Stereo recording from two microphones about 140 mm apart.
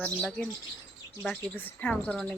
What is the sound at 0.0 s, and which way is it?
Speech, 5° left (ahead or behind).